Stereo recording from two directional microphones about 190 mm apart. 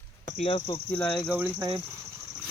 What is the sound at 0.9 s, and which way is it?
Speech, 5° left (ahead or behind).